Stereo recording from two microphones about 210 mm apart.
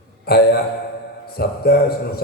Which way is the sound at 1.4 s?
50° left (ahead or behind).